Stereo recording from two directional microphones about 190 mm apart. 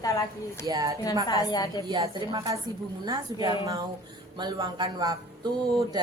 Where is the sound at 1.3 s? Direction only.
20° left (ahead or behind).